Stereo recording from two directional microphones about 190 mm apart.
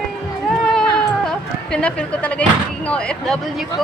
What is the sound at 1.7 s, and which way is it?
Speech, 5° left (ahead or behind).